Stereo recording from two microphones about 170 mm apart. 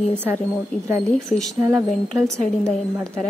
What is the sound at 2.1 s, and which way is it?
Speech, 15° right (ahead or behind).